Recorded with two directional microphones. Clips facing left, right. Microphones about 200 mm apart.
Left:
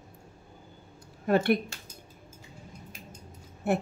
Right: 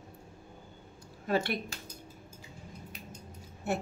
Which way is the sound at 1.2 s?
55° left (ahead or behind).